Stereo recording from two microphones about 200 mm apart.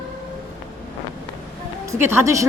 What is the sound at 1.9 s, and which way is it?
Speech, 10° right (ahead or behind).